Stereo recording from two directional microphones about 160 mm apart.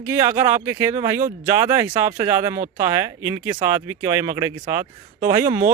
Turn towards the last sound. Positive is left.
turn(degrees=-20)  # may be behind; listen again after turning